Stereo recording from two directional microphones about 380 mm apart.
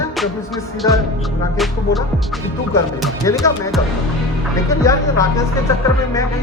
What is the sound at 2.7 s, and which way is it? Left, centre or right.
Speech, centre.